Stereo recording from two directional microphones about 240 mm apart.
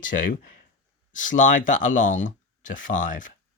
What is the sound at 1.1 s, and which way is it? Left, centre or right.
Speech, left.